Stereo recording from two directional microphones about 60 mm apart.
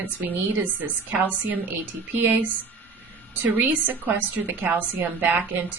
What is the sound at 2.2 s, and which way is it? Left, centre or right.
A woman's voice, right.